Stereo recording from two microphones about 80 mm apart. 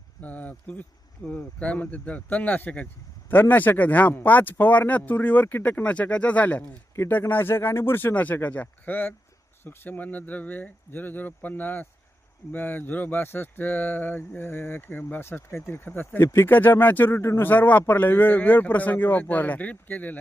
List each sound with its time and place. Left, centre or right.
0.2 s speech: centre
6.9 s speech: left